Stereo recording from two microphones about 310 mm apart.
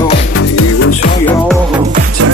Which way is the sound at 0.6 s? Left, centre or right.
Left.